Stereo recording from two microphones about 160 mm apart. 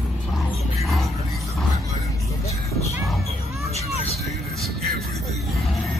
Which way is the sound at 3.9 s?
40° left (ahead or behind).